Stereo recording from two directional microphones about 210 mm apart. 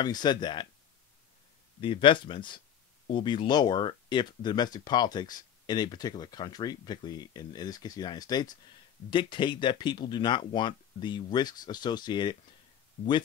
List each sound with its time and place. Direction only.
0.0 s speech: 20° left (ahead or behind)
1.8 s speech: 25° left (ahead or behind)